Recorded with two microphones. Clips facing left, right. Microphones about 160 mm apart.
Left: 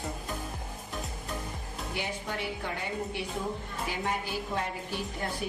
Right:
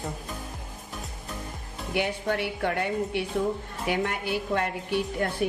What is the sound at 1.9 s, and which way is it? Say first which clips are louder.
A woman's voice: right 9 dB; 65° right (ahead or behind).